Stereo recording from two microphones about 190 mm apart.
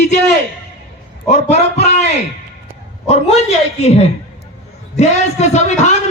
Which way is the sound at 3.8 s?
35° left (ahead or behind).